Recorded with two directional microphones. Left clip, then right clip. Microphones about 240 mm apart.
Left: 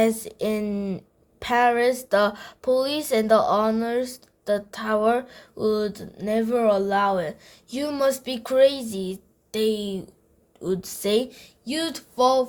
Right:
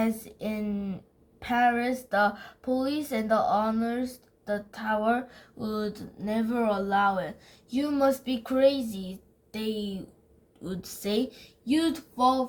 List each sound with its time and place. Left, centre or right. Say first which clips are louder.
0.0 s speech: left 9 dB; left